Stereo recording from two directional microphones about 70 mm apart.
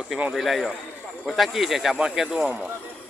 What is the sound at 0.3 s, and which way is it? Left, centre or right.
Speech, centre.